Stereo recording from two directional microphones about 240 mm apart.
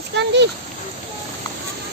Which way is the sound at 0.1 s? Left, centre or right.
Right.